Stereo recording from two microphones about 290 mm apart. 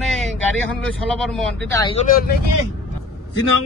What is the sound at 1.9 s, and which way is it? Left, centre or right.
Speech, left.